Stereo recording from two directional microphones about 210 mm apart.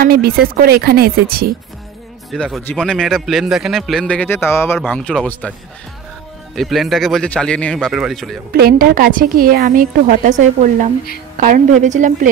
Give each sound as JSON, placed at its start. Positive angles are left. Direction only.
{"t": 0.0, "sound": "a woman's voice", "side_deg": -45}
{"t": 2.3, "sound": "a man's voice", "side_deg": 5}
{"t": 6.5, "sound": "a man's voice", "side_deg": 0}
{"t": 8.5, "sound": "a woman's voice", "side_deg": -45}